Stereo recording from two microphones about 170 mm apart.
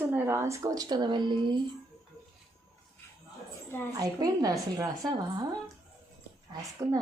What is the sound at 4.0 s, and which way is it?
A woman's voice, 20° right (ahead or behind).